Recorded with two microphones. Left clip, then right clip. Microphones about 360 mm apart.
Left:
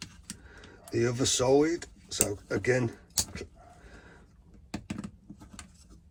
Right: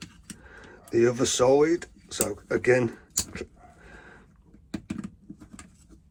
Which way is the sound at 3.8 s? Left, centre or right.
Centre.